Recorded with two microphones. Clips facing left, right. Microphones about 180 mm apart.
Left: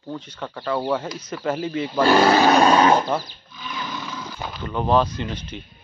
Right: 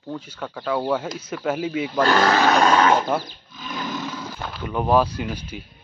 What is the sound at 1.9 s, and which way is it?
Speech, 10° left (ahead or behind).